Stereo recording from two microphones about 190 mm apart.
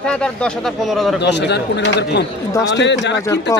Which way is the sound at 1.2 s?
65° left (ahead or behind).